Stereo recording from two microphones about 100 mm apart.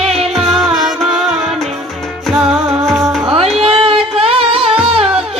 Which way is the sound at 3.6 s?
70° right (ahead or behind).